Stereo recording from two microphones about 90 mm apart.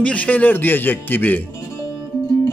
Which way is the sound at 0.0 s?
15° left (ahead or behind).